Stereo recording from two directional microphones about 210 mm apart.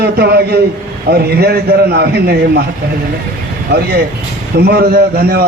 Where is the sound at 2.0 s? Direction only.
50° right (ahead or behind).